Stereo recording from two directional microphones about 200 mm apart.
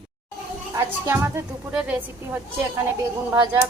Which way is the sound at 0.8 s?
10° right (ahead or behind).